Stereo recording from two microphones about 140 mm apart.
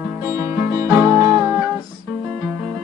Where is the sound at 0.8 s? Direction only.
25° right (ahead or behind).